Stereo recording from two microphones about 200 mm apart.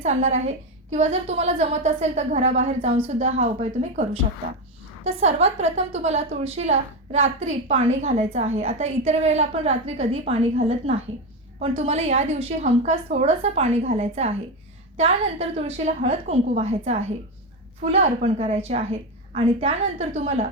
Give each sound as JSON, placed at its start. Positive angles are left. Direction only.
{"t": 0.0, "sound": "a woman's voice", "side_deg": -35}
{"t": 18.0, "sound": "a woman's voice", "side_deg": -30}